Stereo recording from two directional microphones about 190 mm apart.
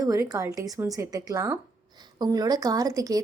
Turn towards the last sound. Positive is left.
turn(degrees=-20)  # may be behind; listen again after turning